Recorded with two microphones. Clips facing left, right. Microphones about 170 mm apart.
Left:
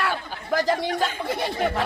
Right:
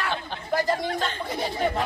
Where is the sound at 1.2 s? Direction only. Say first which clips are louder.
Left 2 dB; 70° left (ahead or behind).